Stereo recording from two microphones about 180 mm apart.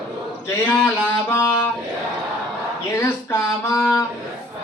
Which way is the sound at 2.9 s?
15° left (ahead or behind).